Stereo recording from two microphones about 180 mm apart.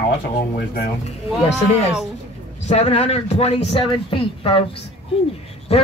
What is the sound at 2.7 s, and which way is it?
A man's voice, 35° left (ahead or behind).